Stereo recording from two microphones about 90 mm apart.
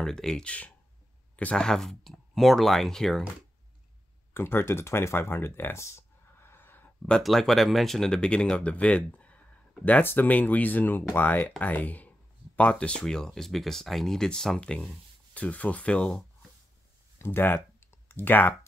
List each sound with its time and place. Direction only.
0.0 s speech: 5° left (ahead or behind)
4.3 s speech: 25° left (ahead or behind)
7.1 s speech: 5° left (ahead or behind)
17.2 s computer keyboard: 25° left (ahead or behind)